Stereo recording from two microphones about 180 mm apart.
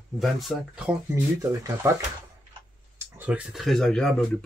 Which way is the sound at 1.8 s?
15° right (ahead or behind).